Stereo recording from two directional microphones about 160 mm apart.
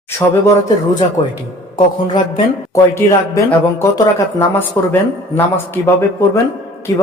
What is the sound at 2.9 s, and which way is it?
Speech, 20° left (ahead or behind).